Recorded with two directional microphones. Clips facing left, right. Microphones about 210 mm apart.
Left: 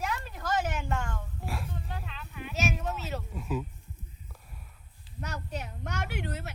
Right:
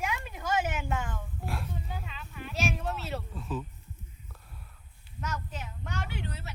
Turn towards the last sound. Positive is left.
turn(degrees=50)  # may be behind; listen again after turning